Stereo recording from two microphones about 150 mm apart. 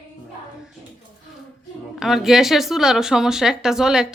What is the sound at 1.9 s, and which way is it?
A woman's voice, centre (ahead or behind).